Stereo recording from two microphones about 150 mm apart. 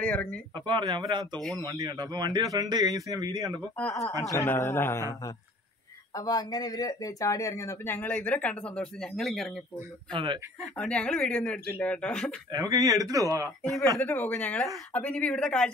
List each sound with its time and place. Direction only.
0.0 s speech: 10° left (ahead or behind)
0.7 s a man's voice: 30° right (ahead or behind)
3.4 s speech: 10° left (ahead or behind)
3.9 s speech: 20° left (ahead or behind)
6.1 s speech: 25° left (ahead or behind); by 9.5 s centre (ahead or behind)
10.1 s a man's voice: 35° right (ahead or behind)
10.8 s speech: 5° left (ahead or behind)
12.4 s speech: 25° right (ahead or behind)
13.6 s speech: centre (ahead or behind)
13.9 s speech: 15° left (ahead or behind)